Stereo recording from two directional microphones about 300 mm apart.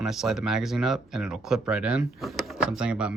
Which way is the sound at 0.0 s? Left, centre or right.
Centre.